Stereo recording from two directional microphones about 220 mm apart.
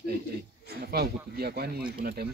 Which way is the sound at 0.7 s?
45° right (ahead or behind).